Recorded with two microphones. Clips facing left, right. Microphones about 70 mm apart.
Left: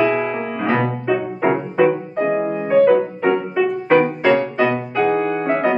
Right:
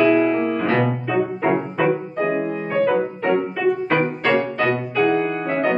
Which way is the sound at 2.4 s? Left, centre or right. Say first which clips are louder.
Left 3 dB; centre.